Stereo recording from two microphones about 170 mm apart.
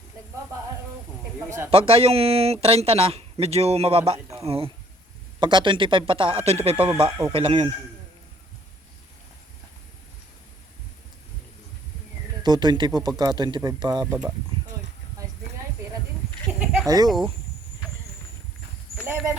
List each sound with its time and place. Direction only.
1.7 s speech: 35° right (ahead or behind)
6.7 s speech: 10° right (ahead or behind)
7.3 s speech: 35° right (ahead or behind)
12.4 s speech: 25° right (ahead or behind)
16.8 s speech: 20° right (ahead or behind)
17.1 s speech: centre (ahead or behind)
18.9 s a sound: 10° right (ahead or behind)